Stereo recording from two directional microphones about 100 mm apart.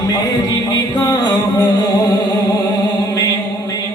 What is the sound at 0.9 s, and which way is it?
Music, 45° left (ahead or behind).